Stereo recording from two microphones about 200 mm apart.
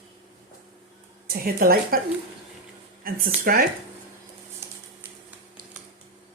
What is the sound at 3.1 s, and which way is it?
Speech, 45° right (ahead or behind).